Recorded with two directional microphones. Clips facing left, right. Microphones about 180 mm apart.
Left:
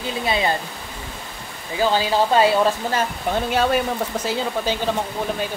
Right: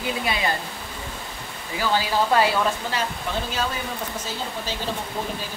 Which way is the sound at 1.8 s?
25° left (ahead or behind).